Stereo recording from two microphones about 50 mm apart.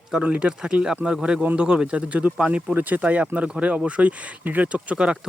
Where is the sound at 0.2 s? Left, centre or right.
Right.